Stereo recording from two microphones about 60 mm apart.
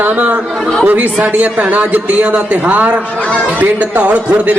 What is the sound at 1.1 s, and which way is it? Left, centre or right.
A man's voice, right.